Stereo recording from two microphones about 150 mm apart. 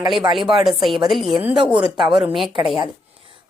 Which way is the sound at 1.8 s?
30° right (ahead or behind).